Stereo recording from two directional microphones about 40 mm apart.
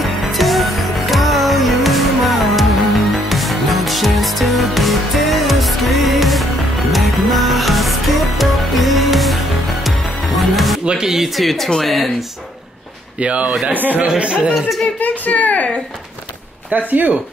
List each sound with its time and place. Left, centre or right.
0.0 s music: centre
10.9 s speech: centre
11.3 s speech: centre
13.2 s speech: right
13.7 s speech: right
14.0 s speech: right
15.0 s a sound: left
16.7 s speech: right